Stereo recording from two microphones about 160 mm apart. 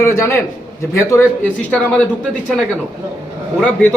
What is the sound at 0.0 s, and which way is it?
Speech, 15° left (ahead or behind).